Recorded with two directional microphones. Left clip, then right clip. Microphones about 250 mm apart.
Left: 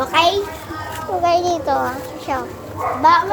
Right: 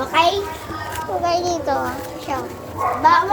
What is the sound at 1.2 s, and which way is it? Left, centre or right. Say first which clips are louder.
Speech: left 4 dB; centre.